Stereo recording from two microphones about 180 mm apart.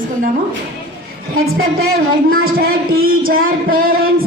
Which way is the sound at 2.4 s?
55° right (ahead or behind).